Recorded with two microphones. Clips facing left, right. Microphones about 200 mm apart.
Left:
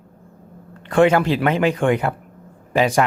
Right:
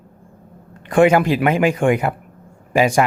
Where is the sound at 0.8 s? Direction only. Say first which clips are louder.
Right 2 dB; 15° right (ahead or behind).